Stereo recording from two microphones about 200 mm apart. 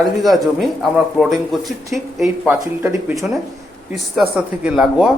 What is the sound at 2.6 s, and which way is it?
Speech, 15° right (ahead or behind).